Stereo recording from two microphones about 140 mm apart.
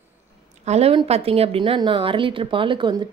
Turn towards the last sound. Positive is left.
turn(degrees=-35)  # may be behind; listen again after turning